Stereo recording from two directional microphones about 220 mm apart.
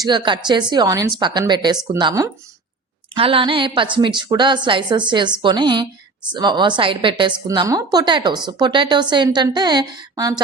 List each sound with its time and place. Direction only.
0.0 s a woman's voice: 20° right (ahead or behind)